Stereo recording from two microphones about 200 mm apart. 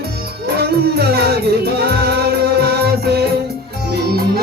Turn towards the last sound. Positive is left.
turn(degrees=-50)  # may be behind; listen again after turning